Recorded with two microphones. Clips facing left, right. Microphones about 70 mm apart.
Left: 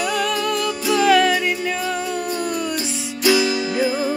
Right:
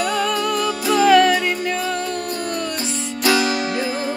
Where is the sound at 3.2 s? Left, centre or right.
Right.